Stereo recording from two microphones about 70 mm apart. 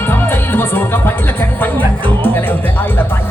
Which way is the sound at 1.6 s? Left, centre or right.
Left.